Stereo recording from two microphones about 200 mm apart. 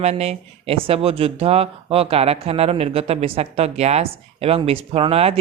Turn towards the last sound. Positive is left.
turn(degrees=-30)  # may be behind; listen again after turning